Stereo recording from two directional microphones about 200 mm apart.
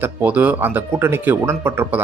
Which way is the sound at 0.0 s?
10° right (ahead or behind).